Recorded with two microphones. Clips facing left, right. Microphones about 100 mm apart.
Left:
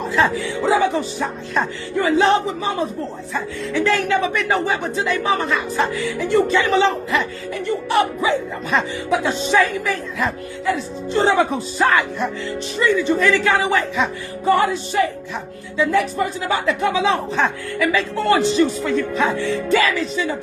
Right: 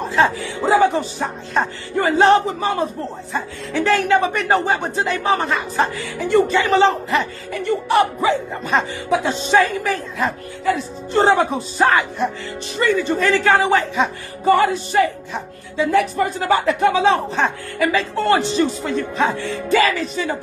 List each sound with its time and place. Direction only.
0.1 s speech: 40° right (ahead or behind)
7.5 s speech: 50° right (ahead or behind)
10.6 s speech: 50° right (ahead or behind)
11.8 s music: 30° right (ahead or behind)
12.7 s speech: 50° right (ahead or behind)
13.2 s speech: 40° right (ahead or behind)
14.4 s music: 60° right (ahead or behind)
15.9 s speech: 60° right (ahead or behind)